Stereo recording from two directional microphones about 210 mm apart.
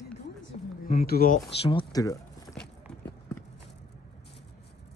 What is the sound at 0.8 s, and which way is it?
Speech, 45° left (ahead or behind).